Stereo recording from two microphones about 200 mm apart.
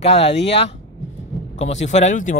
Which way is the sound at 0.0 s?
30° left (ahead or behind).